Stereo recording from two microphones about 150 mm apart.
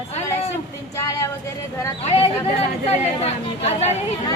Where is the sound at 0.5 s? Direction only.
20° left (ahead or behind).